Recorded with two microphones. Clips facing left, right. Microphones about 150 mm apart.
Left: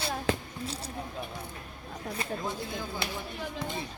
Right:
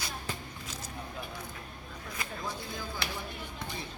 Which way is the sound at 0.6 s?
30° left (ahead or behind).